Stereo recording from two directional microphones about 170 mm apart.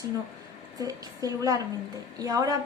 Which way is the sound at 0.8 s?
20° right (ahead or behind).